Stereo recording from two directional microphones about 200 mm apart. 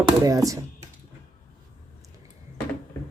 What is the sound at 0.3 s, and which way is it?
Speech, 15° right (ahead or behind).